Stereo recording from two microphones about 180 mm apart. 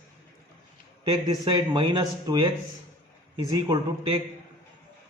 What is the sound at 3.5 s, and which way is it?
Speech, 25° right (ahead or behind).